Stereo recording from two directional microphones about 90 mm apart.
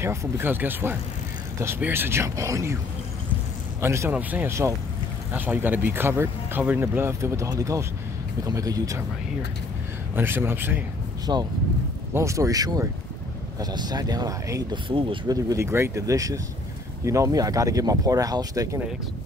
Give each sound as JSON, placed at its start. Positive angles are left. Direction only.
{"t": 0.0, "sound": "speech", "side_deg": -30}
{"t": 3.8, "sound": "speech", "side_deg": -30}
{"t": 4.1, "sound": "speech", "side_deg": -20}
{"t": 10.1, "sound": "speech", "side_deg": -25}
{"t": 11.3, "sound": "speech", "side_deg": -45}
{"t": 12.1, "sound": "speech", "side_deg": -30}
{"t": 14.9, "sound": "speech", "side_deg": -70}
{"t": 15.2, "sound": "speech", "side_deg": -30}